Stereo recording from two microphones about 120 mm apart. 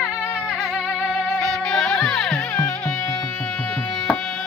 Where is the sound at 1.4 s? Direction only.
5° left (ahead or behind).